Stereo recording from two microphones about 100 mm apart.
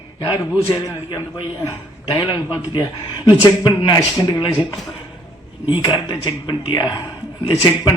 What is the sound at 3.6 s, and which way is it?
Speech, 45° left (ahead or behind).